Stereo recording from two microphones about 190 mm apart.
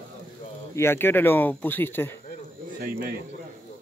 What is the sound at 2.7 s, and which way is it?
Speech, 50° right (ahead or behind).